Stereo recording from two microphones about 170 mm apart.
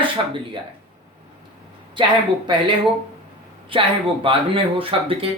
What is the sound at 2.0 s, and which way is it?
Speech, 30° right (ahead or behind).